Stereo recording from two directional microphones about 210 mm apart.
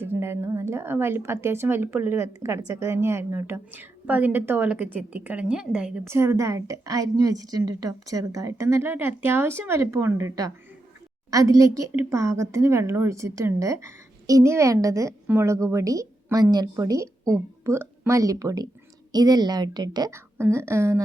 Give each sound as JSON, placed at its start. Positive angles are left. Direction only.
{"t": 0.0, "sound": "a woman's voice", "side_deg": -10}